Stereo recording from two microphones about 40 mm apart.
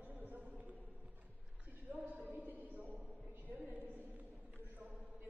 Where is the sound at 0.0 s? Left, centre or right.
Right.